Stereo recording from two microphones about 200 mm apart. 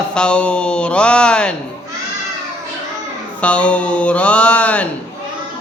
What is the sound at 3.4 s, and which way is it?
Music, 5° left (ahead or behind).